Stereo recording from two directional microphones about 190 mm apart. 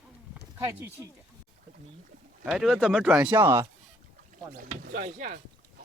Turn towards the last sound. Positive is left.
turn(degrees=-45)  # may be behind; listen again after turning